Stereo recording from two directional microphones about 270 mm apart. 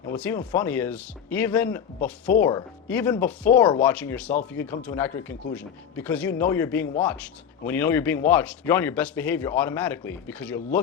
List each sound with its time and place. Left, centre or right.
0.0 s speech: centre
3.6 s speech: centre
3.8 s speech: centre